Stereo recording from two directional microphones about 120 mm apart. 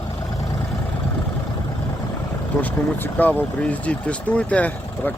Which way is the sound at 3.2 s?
15° left (ahead or behind).